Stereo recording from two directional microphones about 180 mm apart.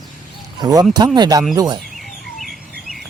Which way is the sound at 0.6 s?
20° right (ahead or behind).